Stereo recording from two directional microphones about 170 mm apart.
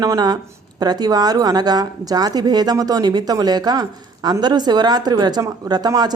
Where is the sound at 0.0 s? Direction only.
20° right (ahead or behind).